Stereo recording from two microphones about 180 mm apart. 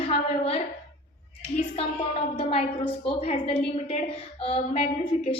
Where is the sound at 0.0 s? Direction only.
30° left (ahead or behind).